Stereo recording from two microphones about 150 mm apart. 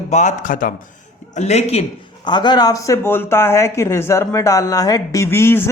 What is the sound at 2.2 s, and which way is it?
Speech, 30° left (ahead or behind).